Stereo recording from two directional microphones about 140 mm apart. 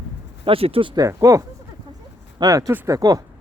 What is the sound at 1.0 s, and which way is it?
Speech, 25° right (ahead or behind).